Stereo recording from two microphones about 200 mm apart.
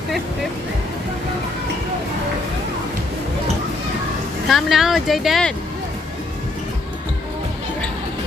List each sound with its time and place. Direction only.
4.5 s speech: centre (ahead or behind)